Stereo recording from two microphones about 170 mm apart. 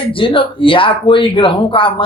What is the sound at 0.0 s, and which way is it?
A man's voice, 30° left (ahead or behind).